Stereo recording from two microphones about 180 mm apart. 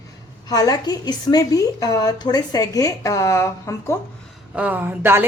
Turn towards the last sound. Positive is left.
turn(degrees=-10)  # may be behind; listen again after turning